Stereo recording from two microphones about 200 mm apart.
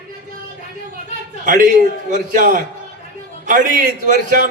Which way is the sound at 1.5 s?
40° right (ahead or behind).